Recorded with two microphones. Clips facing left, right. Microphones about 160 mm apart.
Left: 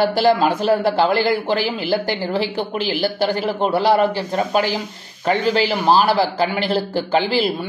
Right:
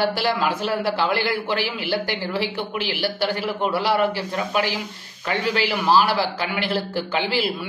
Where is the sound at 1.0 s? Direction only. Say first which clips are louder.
Left 5 dB; 35° left (ahead or behind).